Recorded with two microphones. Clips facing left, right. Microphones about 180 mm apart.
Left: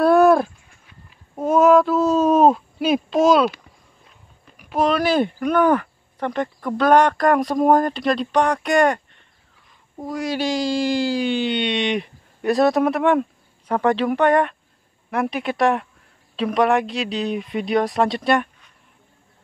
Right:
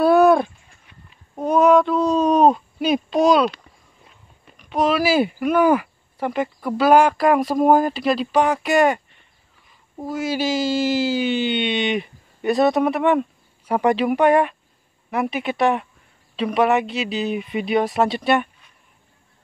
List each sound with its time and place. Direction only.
0.0 s a sound: centre (ahead or behind)
4.6 s speech: centre (ahead or behind)
13.7 s speech: 10° right (ahead or behind)